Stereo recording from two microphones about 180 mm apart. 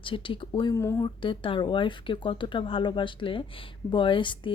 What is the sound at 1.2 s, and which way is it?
Speech, 30° left (ahead or behind).